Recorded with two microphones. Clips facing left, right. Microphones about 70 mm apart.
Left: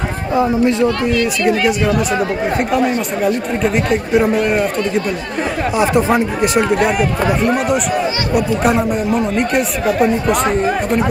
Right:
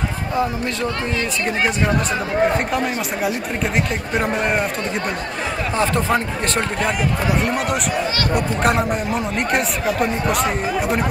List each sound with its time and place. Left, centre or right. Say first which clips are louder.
0.4 s speech: left 9 dB; left
1.1 s speech: left 7 dB; right
4.5 s speech: left 5 dB; centre
5.8 s speech: left 5 dB; centre
6.8 s speech: left 6 dB; left
7.4 s speech: left 5 dB; centre
9.8 s speech: left 8 dB; left